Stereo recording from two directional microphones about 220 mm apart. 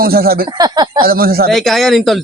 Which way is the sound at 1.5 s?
Centre (ahead or behind).